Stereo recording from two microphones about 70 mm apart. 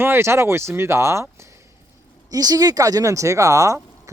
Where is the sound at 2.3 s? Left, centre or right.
Right.